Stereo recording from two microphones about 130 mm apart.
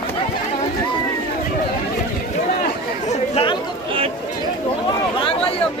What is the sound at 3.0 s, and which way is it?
Chatter, 45° left (ahead or behind).